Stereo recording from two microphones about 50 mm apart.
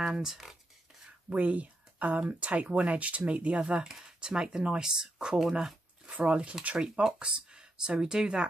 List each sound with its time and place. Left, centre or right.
0.0 s speech: centre
1.3 s speech: right; by 5.8 s centre
6.0 s speech: right